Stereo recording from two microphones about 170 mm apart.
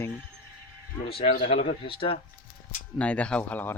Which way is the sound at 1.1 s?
35° left (ahead or behind).